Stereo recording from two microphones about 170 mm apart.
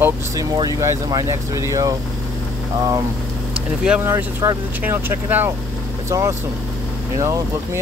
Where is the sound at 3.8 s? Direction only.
10° right (ahead or behind).